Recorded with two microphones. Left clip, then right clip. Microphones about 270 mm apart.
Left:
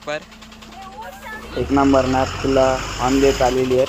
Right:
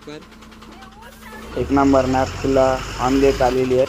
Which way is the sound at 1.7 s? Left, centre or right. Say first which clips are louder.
Even; centre.